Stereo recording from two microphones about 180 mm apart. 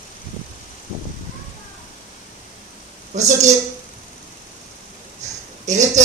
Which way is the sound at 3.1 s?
40° right (ahead or behind).